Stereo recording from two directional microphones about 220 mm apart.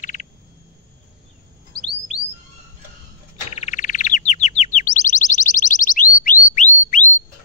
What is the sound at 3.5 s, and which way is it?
Chirp, 30° left (ahead or behind).